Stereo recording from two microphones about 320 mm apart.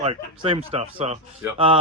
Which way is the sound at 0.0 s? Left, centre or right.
Centre.